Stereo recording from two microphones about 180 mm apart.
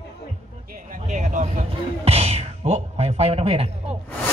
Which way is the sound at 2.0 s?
35° right (ahead or behind).